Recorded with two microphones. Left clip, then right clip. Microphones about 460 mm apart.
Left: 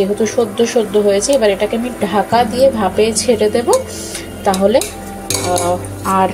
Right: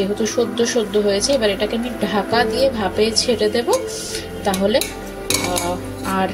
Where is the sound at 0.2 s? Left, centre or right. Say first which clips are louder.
Left 4 dB; right.